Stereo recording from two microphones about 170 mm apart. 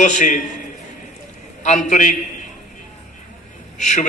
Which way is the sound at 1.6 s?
45° left (ahead or behind).